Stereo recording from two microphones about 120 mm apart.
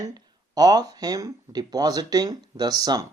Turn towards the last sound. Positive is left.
turn(degrees=-30)  # may be behind; listen again after turning